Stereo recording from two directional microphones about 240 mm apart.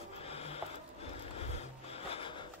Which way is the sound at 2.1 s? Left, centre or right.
Left.